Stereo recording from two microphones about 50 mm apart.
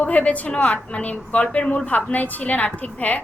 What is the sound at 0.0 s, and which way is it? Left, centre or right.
A woman's voice, left.